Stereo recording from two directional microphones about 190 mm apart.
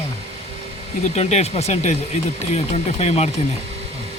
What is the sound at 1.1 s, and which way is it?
Speech, 35° left (ahead or behind).